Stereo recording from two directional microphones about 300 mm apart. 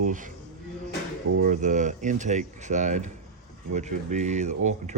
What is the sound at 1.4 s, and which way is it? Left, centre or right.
Speech, right.